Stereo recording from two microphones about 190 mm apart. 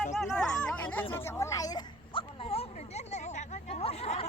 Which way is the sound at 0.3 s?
5° left (ahead or behind).